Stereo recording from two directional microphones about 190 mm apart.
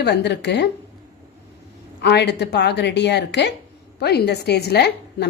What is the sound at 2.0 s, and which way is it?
A woman's voice, 60° left (ahead or behind).